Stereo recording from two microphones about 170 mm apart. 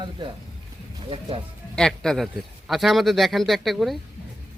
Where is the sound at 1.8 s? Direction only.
5° left (ahead or behind).